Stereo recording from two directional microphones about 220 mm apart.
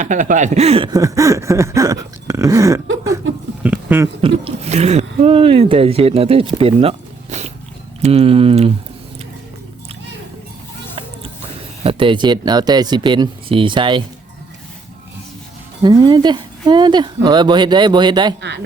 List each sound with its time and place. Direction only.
0.0 s speech: 35° right (ahead or behind); by 4.1 s 10° right (ahead or behind)
4.2 s speech: 25° right (ahead or behind)
11.8 s speech: 25° right (ahead or behind)
15.8 s speech: 20° right (ahead or behind)